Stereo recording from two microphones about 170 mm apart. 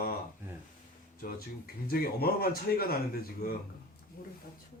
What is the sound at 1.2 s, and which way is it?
Speech, 65° left (ahead or behind).